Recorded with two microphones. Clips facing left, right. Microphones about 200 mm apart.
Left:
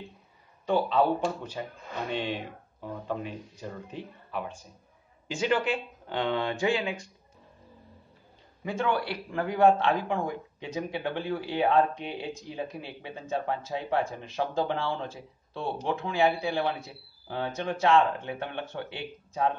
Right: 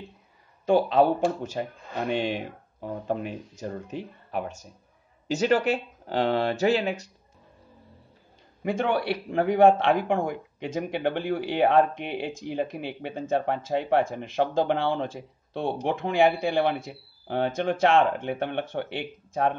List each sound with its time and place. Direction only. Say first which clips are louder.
0.7 s speech: right 4 dB; 45° right (ahead or behind)
2.1 s speech: right 4 dB; 10° right (ahead or behind)
2.8 s speech: right 4 dB; 45° right (ahead or behind)
8.6 s speech: right 4 dB; 60° right (ahead or behind)